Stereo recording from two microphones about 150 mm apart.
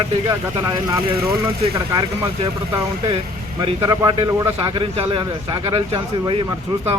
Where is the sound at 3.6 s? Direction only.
30° right (ahead or behind).